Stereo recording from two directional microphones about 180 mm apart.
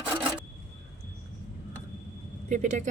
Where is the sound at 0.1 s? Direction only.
10° right (ahead or behind).